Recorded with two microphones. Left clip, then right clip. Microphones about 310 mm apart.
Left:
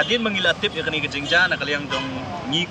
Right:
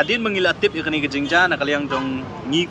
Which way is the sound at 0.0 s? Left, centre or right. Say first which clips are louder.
Right 1 dB; centre.